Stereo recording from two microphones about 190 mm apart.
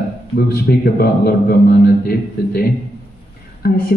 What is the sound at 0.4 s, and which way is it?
A man's voice, 55° left (ahead or behind).